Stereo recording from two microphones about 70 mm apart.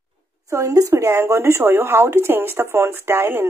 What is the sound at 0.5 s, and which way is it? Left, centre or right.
Speech, right.